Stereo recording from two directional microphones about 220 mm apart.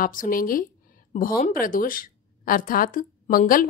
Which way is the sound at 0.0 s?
40° left (ahead or behind).